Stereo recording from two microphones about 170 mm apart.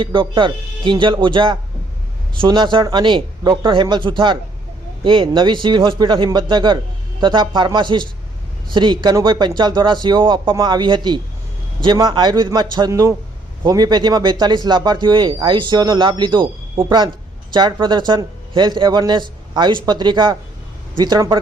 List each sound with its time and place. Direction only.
0.0 s speech: 30° right (ahead or behind)